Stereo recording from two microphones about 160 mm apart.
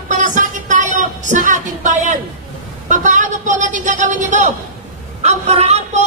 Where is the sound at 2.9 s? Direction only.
50° right (ahead or behind).